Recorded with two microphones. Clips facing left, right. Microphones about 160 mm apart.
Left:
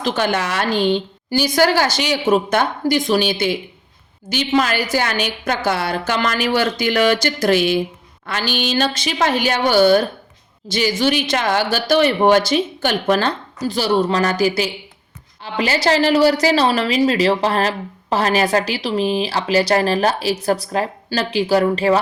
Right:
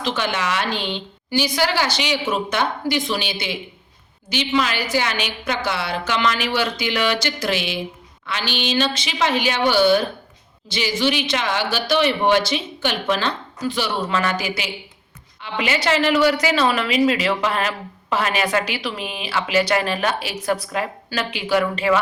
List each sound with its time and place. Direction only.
0.0 s a woman's voice: 45° left (ahead or behind)